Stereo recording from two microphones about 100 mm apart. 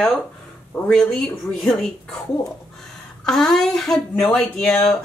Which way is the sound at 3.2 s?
5° left (ahead or behind).